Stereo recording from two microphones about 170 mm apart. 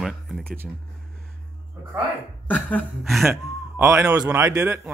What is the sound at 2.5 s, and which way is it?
Speech, 5° left (ahead or behind).